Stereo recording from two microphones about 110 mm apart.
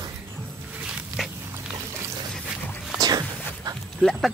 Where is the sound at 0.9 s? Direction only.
5° right (ahead or behind).